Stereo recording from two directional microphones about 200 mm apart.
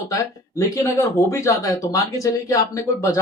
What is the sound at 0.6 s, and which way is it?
Speech, 15° left (ahead or behind).